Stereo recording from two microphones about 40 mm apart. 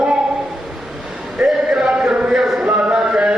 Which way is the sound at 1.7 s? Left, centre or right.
Right.